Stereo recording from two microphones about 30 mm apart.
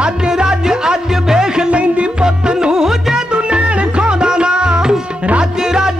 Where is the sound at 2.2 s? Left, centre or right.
Right.